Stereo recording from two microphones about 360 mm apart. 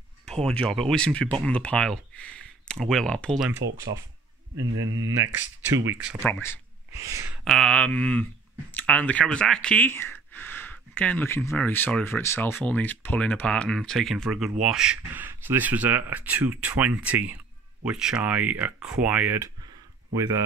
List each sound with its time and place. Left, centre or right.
0.2 s speech: centre
4.7 s speech: right
5.9 s speech: centre
6.9 s speech: centre